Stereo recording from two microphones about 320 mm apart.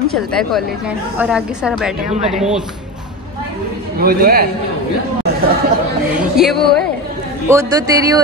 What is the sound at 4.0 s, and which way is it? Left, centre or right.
Speech, right.